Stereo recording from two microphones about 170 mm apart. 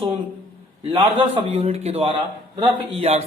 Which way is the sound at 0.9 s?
30° right (ahead or behind).